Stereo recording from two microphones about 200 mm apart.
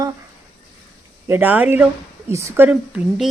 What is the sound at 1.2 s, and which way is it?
Speech, 10° right (ahead or behind).